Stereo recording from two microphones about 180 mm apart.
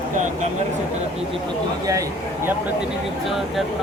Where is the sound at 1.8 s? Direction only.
20° right (ahead or behind).